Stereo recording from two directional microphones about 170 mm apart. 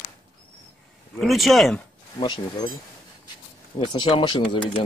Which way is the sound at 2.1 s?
25° left (ahead or behind).